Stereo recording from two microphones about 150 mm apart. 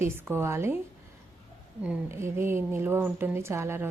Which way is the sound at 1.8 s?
15° right (ahead or behind).